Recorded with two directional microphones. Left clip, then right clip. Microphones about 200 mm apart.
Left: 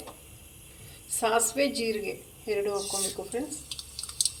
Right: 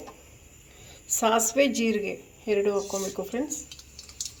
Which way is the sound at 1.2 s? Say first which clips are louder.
Right 3 dB; 45° right (ahead or behind).